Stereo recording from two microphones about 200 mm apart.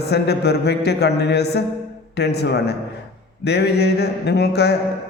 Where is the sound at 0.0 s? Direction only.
55° left (ahead or behind).